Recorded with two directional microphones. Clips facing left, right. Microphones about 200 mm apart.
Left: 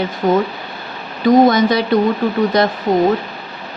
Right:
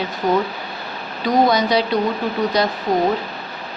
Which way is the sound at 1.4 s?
50° left (ahead or behind).